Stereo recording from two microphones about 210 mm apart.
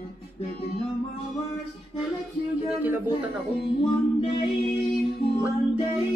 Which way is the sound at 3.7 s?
30° left (ahead or behind).